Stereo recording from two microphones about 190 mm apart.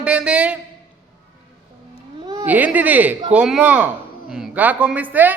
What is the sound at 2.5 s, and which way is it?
A man's voice, 10° right (ahead or behind).